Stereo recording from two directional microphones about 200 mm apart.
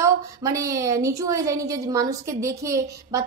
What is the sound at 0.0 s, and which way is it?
A woman's voice, 15° right (ahead or behind).